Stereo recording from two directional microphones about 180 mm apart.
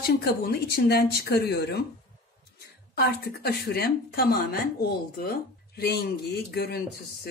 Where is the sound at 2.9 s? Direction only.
60° left (ahead or behind).